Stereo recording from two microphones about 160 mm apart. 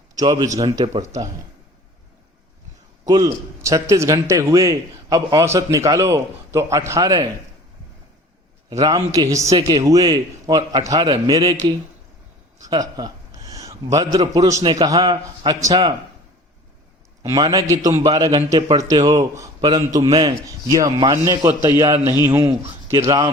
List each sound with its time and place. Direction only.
0.2 s a man's voice: 25° right (ahead or behind)
3.1 s a man's voice: 25° right (ahead or behind)
8.8 s a man's voice: 20° right (ahead or behind)
12.7 s a man's voice: 25° right (ahead or behind)
17.2 s a man's voice: 20° right (ahead or behind)